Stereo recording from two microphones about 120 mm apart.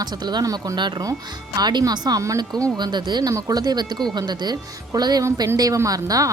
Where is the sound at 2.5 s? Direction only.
10° left (ahead or behind).